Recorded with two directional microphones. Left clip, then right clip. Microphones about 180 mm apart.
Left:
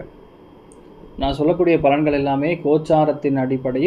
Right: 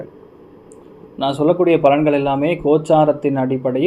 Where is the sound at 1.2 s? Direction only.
20° right (ahead or behind).